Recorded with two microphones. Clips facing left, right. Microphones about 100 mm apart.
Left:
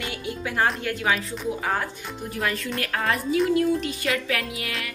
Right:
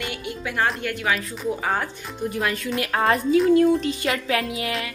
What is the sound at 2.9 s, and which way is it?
A woman's voice, 30° right (ahead or behind).